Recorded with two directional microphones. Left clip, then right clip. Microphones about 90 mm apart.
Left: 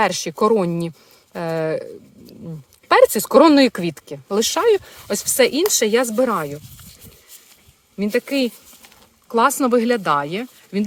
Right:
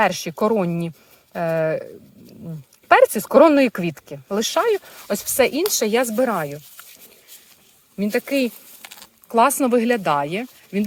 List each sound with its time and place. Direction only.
0.0 s speech: 5° left (ahead or behind)
7.9 s speech: centre (ahead or behind)
9.3 s speech: 5° right (ahead or behind)